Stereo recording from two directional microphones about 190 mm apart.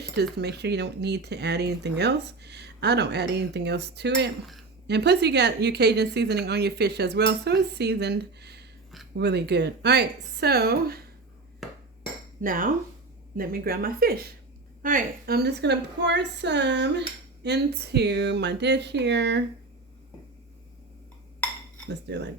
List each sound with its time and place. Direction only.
0.3 s speech: 60° right (ahead or behind)
11.6 s a sound: centre (ahead or behind)
12.4 s a woman's voice: 45° right (ahead or behind); by 19.5 s 65° right (ahead or behind)
21.4 s dishes: 10° left (ahead or behind)
21.8 s speech: 65° right (ahead or behind)